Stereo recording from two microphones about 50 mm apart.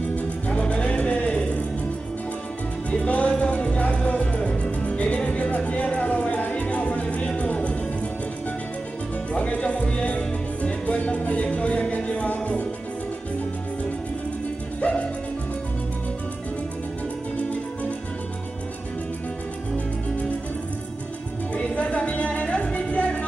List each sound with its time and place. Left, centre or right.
0.1 s music: left
2.9 s music: left
9.3 s music: left
14.8 s music: left
21.5 s music: left